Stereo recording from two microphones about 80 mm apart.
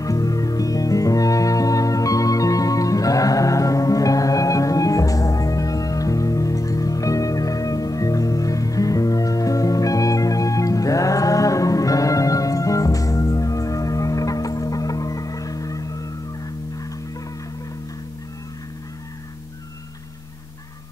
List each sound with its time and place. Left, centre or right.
0.0 s music: left